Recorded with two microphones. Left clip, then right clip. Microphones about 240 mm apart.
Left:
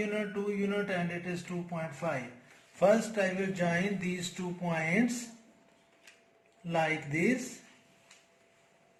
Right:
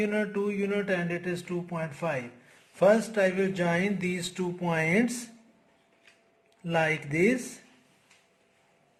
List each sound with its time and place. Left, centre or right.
0.0 s speech: right
6.7 s speech: right